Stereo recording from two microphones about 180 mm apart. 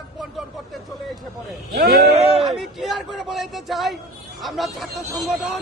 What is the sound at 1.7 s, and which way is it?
Speech, 60° right (ahead or behind).